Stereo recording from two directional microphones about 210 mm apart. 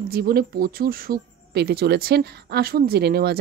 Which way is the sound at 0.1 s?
45° right (ahead or behind).